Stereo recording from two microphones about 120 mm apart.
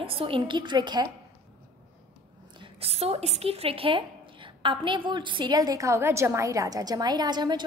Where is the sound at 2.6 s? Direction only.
55° right (ahead or behind).